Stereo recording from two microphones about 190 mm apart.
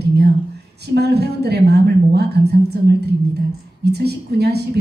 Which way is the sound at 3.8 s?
60° right (ahead or behind).